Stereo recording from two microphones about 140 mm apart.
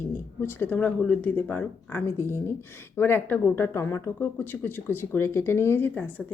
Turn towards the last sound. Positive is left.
turn(degrees=10)  # may be behind; listen again after turning